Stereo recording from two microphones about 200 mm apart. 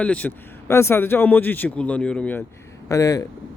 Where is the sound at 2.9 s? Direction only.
15° left (ahead or behind).